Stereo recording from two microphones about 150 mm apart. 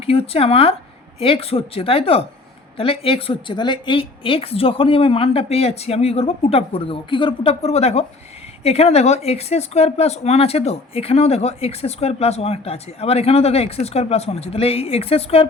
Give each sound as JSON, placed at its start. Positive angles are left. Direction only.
{"t": 0.0, "sound": "a woman's voice", "side_deg": 40}